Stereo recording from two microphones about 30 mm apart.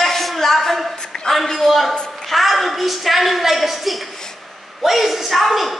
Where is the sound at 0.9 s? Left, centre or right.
Left.